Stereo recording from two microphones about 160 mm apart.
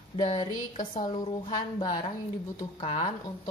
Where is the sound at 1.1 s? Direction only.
30° left (ahead or behind).